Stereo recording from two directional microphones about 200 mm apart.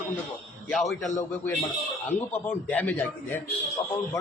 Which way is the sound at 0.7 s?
Centre (ahead or behind).